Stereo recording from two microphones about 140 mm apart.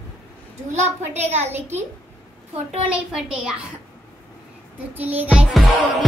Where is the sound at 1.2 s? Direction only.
50° right (ahead or behind).